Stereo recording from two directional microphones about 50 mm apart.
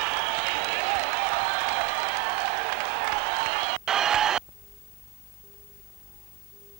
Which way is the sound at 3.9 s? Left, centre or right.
Centre.